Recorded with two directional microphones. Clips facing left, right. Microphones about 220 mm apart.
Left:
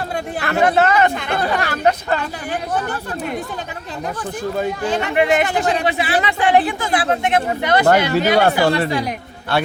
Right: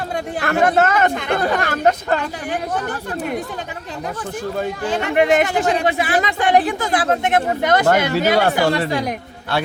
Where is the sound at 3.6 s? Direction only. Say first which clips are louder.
Even; 15° right (ahead or behind).